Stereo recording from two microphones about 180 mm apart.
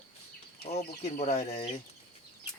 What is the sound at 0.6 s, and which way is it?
Speech, 35° left (ahead or behind).